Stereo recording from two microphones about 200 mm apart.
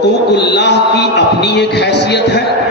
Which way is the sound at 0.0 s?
60° left (ahead or behind).